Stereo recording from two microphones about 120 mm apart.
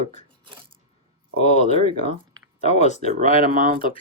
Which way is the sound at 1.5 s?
80° left.